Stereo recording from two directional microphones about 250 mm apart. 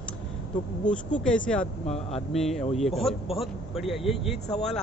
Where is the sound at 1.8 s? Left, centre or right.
Left.